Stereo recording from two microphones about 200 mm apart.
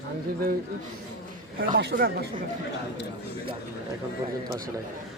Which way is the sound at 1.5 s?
45° right (ahead or behind).